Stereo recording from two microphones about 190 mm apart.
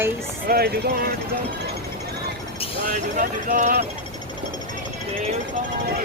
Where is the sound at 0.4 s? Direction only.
55° right (ahead or behind).